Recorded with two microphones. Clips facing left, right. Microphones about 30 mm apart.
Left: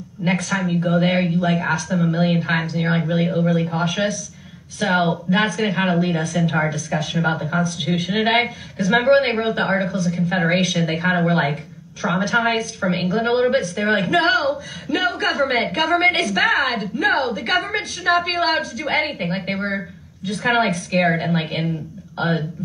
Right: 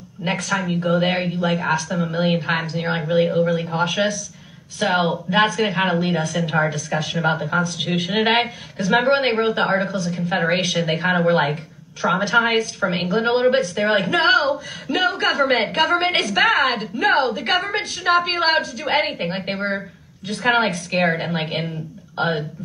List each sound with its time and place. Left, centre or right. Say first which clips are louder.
0.2 s a woman's voice: left 1 dB; centre
1.1 s speech: left 3 dB; right
1.4 s a woman's voice: even; centre
2.0 s a woman's voice: left 1 dB; right
3.7 s a woman's voice: right 1 dB; right